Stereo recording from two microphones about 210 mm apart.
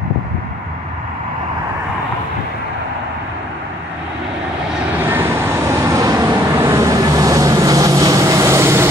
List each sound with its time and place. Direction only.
5.0 s vehicle: 10° right (ahead or behind)